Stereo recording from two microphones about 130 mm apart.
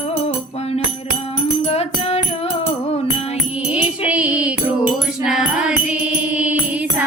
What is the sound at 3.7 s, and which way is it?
Music, 10° right (ahead or behind).